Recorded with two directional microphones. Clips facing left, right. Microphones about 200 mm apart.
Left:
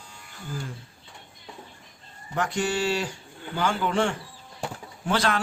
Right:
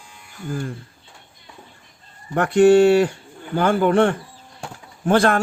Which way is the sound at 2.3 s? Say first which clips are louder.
Right 14 dB; 60° right (ahead or behind).